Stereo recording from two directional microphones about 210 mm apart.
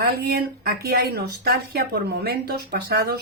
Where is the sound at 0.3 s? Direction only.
45° right (ahead or behind).